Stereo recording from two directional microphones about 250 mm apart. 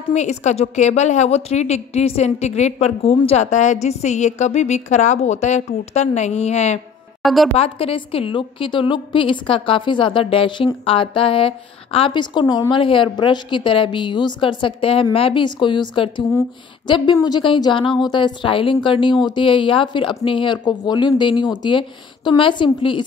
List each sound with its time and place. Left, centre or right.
0.1 s a woman's voice: left